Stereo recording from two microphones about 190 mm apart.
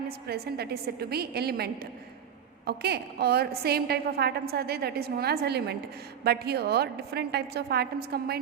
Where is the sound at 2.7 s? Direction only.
60° right (ahead or behind).